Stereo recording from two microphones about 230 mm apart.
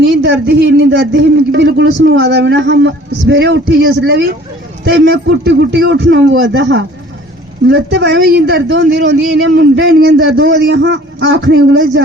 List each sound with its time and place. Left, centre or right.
0.0 s speech: right
10.0 s speech: right